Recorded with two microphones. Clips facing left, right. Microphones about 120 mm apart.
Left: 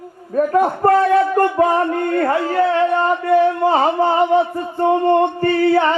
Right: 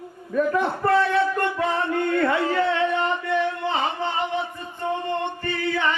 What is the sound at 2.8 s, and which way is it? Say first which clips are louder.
Speech: left 7 dB; 50° left (ahead or behind).